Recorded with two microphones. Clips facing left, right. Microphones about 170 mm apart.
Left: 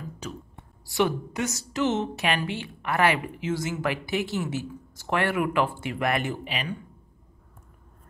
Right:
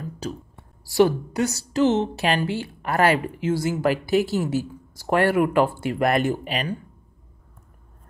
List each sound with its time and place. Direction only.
0.8 s a woman's voice: 35° right (ahead or behind)